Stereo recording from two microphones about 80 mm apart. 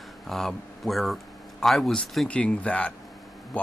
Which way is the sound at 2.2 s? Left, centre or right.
Centre.